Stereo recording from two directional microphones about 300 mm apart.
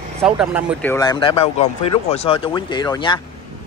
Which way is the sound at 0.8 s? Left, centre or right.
Centre.